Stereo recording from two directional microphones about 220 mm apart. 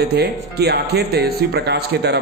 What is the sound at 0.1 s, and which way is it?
Speech, 45° right (ahead or behind).